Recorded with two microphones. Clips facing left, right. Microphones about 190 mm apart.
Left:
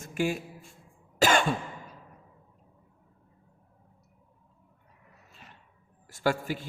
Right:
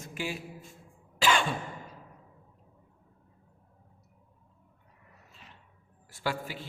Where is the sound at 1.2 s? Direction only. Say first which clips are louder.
Left 3 dB; 45° left (ahead or behind).